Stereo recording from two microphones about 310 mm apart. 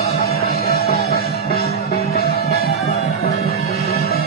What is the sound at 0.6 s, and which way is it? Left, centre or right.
Music, left.